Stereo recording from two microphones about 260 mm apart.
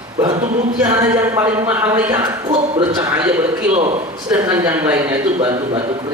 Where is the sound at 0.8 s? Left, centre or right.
Centre.